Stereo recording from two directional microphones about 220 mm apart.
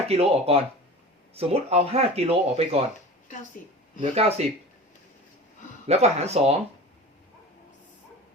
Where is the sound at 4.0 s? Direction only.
30° right (ahead or behind).